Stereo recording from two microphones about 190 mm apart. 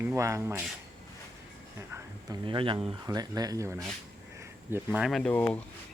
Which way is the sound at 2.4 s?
25° right (ahead or behind).